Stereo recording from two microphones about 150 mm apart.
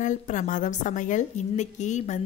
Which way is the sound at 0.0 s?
55° left (ahead or behind).